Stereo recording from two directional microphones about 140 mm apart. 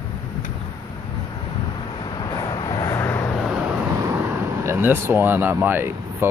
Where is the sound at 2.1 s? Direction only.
30° left (ahead or behind).